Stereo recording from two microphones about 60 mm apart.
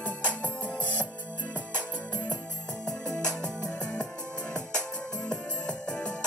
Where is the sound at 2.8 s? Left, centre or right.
Centre.